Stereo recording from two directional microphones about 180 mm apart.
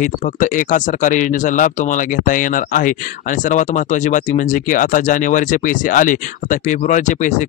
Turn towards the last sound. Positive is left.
turn(degrees=45)  # may be behind; listen again after turning